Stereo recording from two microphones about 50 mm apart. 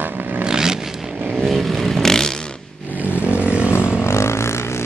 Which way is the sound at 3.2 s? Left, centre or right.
Left.